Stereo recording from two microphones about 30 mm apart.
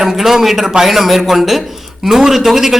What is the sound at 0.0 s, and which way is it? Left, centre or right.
A man's voice, centre.